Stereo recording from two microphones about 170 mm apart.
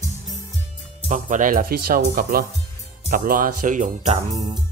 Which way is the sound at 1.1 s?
50° right (ahead or behind).